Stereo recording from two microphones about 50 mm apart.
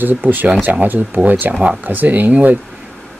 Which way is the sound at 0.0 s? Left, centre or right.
Right.